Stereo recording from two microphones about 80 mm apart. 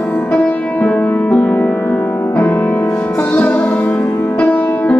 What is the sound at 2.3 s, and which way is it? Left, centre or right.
Music, centre.